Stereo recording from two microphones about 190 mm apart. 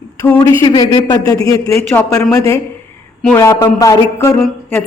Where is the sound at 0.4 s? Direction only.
20° left (ahead or behind).